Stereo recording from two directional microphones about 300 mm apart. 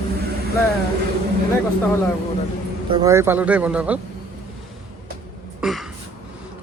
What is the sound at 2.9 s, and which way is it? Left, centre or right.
Speech, centre.